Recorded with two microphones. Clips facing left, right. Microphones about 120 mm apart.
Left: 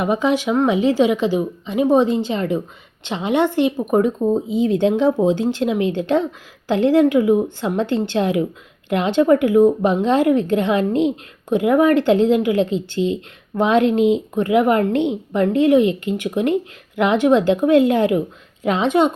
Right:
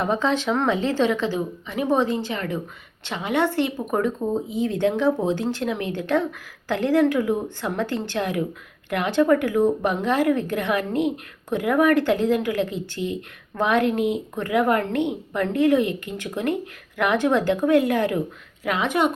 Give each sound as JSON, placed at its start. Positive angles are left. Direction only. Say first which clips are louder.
{"t": 0.0, "sound": "a woman's voice", "louder": "left 4 dB", "side_deg": 10}